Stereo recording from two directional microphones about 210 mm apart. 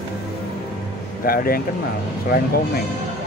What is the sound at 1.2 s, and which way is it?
Speech, 45° left (ahead or behind).